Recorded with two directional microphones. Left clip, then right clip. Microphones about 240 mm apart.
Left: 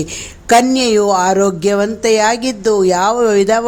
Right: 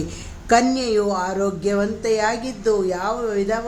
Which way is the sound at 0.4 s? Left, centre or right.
Left.